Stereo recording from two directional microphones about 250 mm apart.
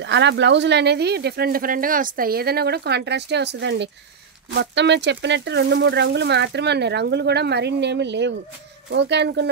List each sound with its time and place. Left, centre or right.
0.0 s speech: right